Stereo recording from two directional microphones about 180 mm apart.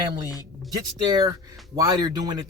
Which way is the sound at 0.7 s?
20° right (ahead or behind).